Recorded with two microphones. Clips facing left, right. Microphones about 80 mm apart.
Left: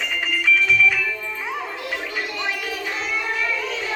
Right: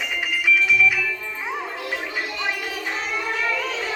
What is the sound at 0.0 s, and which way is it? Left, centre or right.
Music, centre.